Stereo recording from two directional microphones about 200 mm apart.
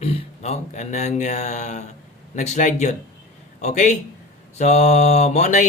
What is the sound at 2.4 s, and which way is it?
Mantra, 40° left (ahead or behind).